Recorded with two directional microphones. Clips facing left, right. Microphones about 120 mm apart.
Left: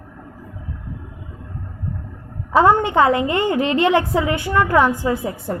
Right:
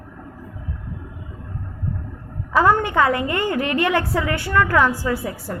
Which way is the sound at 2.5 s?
25° left (ahead or behind).